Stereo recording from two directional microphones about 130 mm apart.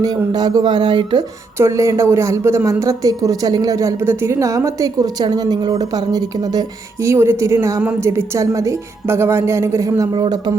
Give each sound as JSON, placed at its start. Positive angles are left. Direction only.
{"t": 0.0, "sound": "speech", "side_deg": -30}
{"t": 1.5, "sound": "speech", "side_deg": -20}